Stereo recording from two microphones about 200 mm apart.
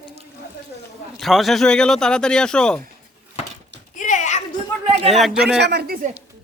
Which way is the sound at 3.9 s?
40° left (ahead or behind).